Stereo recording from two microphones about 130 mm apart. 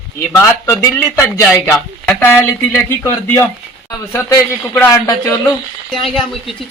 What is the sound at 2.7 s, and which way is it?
A man's voice, 20° left (ahead or behind).